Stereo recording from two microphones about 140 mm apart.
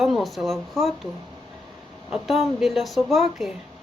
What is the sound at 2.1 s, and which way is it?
Speech, centre (ahead or behind).